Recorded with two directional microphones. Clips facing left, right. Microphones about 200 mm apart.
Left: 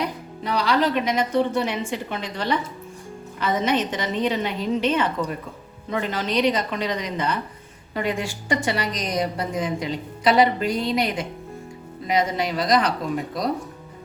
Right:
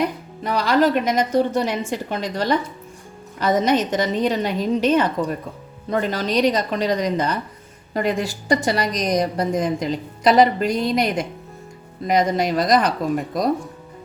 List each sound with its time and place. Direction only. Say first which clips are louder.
0.4 s a woman's voice: right 4 dB; 45° right (ahead or behind)